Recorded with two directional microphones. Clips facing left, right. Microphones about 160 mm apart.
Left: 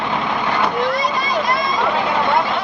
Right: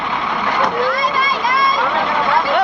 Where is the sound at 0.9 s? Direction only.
90° right.